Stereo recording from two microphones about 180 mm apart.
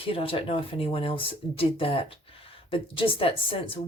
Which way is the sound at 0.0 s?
30° left (ahead or behind).